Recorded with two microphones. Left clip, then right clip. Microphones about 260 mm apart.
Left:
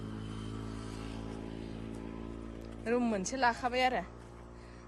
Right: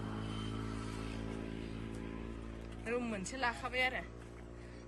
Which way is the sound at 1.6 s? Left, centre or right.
Left.